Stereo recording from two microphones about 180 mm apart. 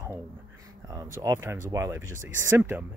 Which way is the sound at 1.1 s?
15° right (ahead or behind).